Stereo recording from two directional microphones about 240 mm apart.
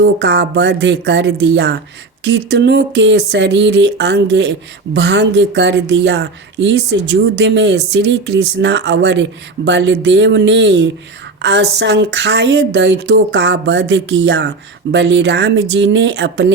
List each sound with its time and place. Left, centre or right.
0.0 s speech: right